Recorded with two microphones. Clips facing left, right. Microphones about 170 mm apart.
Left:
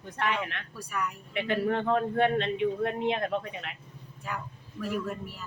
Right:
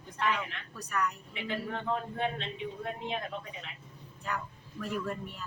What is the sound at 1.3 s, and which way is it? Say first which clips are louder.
A man's voice: left 8 dB; 65° left (ahead or behind).